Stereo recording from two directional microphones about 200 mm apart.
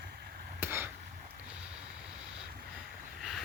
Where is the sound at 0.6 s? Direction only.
10° right (ahead or behind).